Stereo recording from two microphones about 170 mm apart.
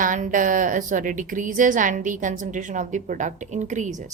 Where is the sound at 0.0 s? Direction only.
50° right (ahead or behind).